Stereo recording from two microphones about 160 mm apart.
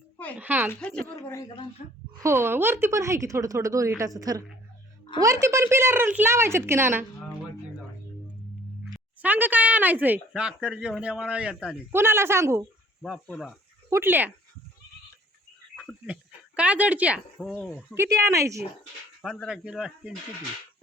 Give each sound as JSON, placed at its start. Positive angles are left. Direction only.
{"t": 0.3, "sound": "speech", "side_deg": -10}
{"t": 0.7, "sound": "a woman's voice", "side_deg": 10}
{"t": 2.1, "sound": "speech", "side_deg": -15}
{"t": 8.8, "sound": "speech", "side_deg": -10}
{"t": 13.0, "sound": "speech", "side_deg": 5}
{"t": 13.9, "sound": "speech", "side_deg": -15}
{"t": 15.7, "sound": "a sound", "side_deg": 5}
{"t": 16.6, "sound": "speech", "side_deg": -10}
{"t": 17.3, "sound": "speech", "side_deg": 5}
{"t": 17.9, "sound": "speech", "side_deg": -15}
{"t": 19.2, "sound": "speech", "side_deg": -5}